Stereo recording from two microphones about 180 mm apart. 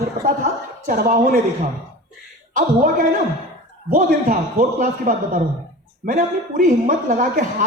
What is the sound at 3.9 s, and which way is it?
A woman's voice, 50° right (ahead or behind).